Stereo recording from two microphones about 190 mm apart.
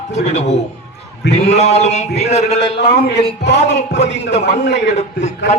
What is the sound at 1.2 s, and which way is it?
Speech, 65° left (ahead or behind).